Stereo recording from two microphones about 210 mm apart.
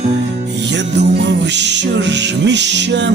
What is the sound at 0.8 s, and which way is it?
Music, 55° right (ahead or behind).